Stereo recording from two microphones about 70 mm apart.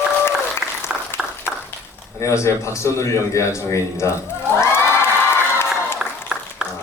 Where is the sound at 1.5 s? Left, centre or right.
Centre.